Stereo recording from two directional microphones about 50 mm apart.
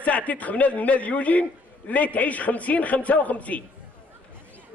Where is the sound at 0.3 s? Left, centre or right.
Left.